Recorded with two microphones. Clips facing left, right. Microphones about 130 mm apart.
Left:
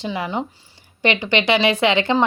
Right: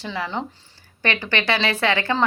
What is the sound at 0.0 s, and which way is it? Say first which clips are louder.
Speech: left 3 dB; 15° left (ahead or behind).